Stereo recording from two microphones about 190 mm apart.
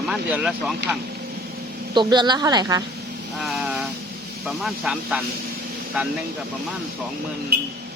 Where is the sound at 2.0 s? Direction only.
25° right (ahead or behind).